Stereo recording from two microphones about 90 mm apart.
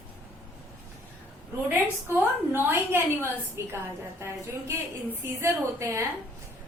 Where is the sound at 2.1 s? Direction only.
25° right (ahead or behind).